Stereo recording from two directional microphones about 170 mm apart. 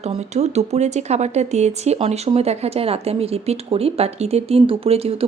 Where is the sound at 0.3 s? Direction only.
40° right (ahead or behind).